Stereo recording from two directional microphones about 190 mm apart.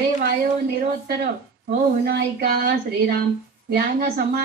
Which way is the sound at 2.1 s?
55° right (ahead or behind).